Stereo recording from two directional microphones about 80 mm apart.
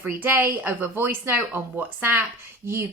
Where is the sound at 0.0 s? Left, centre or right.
Right.